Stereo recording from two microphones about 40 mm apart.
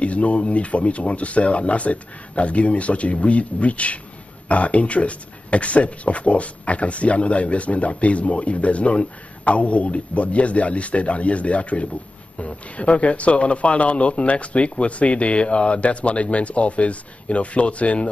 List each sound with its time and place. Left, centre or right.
0.0 s speech: left